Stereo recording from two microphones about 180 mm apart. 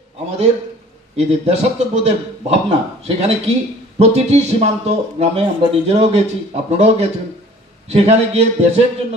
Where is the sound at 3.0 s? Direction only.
35° right (ahead or behind).